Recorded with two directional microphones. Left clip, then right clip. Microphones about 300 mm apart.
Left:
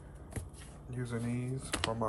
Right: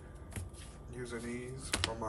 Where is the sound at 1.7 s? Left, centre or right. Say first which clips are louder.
Left 2 dB; centre.